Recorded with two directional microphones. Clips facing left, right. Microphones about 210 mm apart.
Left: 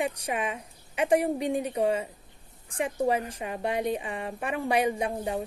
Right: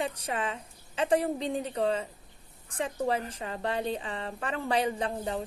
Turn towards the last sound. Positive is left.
turn(degrees=15)  # may be behind; listen again after turning